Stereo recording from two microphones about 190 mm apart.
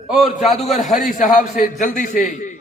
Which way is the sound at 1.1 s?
45° left (ahead or behind).